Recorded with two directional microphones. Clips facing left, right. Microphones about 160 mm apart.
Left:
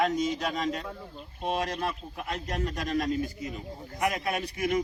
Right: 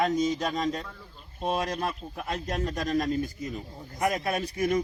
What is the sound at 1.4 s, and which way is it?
Speech, 40° right (ahead or behind).